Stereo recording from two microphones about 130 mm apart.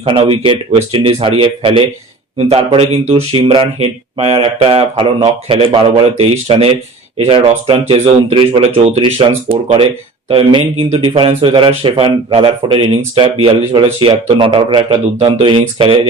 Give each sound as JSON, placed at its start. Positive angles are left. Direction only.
{"t": 0.0, "sound": "speech", "side_deg": -45}
{"t": 10.2, "sound": "speech", "side_deg": -45}